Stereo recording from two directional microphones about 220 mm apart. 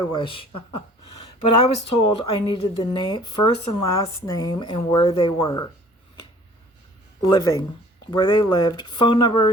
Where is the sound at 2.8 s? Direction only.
20° left (ahead or behind).